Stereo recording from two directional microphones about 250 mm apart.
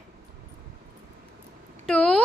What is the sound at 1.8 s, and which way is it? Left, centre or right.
Speech, centre.